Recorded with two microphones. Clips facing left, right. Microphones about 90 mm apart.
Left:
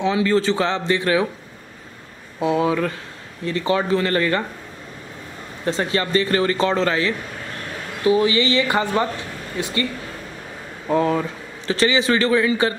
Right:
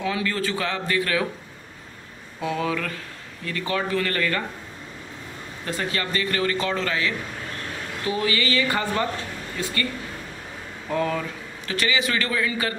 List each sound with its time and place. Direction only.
0.0 s a man's voice: 25° left (ahead or behind)
2.4 s a man's voice: 25° left (ahead or behind)
5.7 s a man's voice: 30° left (ahead or behind)
8.1 s a man's voice: 25° left (ahead or behind)
10.9 s a man's voice: 25° left (ahead or behind)